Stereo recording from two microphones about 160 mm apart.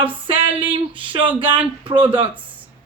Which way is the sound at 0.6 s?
30° right (ahead or behind).